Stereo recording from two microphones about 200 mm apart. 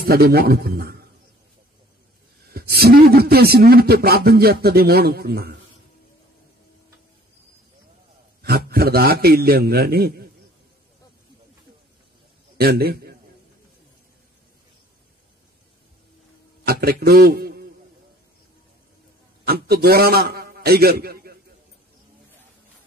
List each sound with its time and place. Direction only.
0.0 s speech: 50° right (ahead or behind)
2.5 s speech: 50° right (ahead or behind)
8.4 s speech: 50° right (ahead or behind)
12.5 s a man's voice: 50° right (ahead or behind)
16.6 s a man's voice: 50° right (ahead or behind)
19.4 s a man's voice: 50° right (ahead or behind)